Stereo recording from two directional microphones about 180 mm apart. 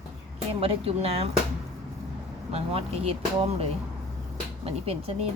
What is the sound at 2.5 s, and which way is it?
Speech, 35° right (ahead or behind).